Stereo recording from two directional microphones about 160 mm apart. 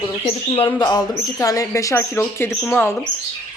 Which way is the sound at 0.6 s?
25° left (ahead or behind).